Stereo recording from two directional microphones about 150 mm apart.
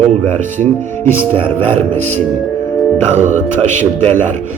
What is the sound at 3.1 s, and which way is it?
Speech, 55° right (ahead or behind).